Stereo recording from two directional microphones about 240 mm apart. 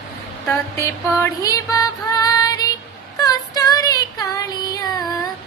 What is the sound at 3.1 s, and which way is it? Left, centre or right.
Child singing, centre.